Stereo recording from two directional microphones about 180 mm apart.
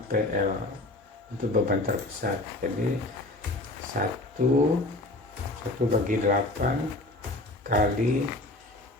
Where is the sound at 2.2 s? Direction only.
50° right (ahead or behind).